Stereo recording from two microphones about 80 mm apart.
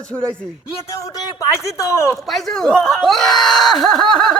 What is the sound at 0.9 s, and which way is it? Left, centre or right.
Speech, left.